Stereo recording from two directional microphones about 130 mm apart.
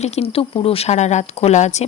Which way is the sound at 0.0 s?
50° left (ahead or behind).